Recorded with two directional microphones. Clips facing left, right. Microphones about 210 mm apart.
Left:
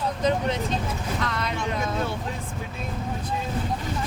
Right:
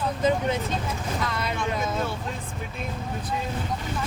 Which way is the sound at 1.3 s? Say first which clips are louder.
Even; 5° right (ahead or behind).